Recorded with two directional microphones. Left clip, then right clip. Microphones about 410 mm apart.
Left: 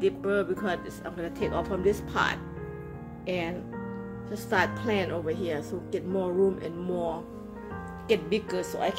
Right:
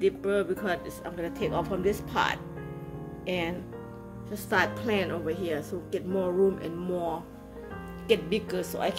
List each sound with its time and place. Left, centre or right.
0.0 s speech: centre
8.1 s speech: centre